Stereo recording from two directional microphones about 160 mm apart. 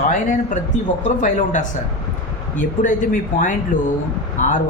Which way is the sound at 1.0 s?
50° left (ahead or behind).